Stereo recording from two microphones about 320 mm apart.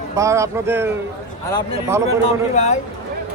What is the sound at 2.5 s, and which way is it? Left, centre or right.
Speech, left.